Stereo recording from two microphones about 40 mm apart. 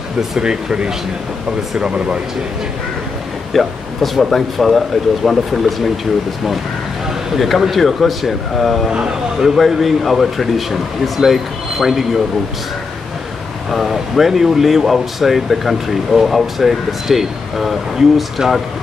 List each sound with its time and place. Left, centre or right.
0.4 s speech: right
3.5 s speech: centre
7.3 s speech: centre
13.7 s speech: centre